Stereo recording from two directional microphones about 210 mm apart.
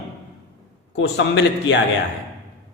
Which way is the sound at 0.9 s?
55° left (ahead or behind).